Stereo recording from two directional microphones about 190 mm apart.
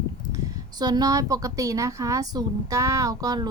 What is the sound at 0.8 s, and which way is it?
A woman's voice, 20° right (ahead or behind).